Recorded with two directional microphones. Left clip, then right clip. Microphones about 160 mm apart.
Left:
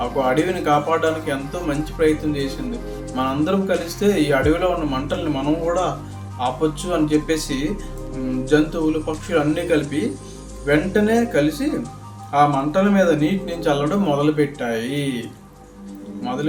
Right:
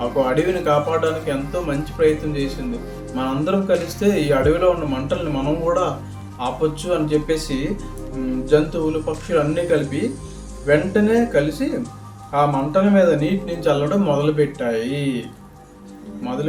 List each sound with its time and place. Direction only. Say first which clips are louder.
0.0 s speech: right 1 dB; 20° left (ahead or behind)
16.2 s speech: left 1 dB; 20° left (ahead or behind)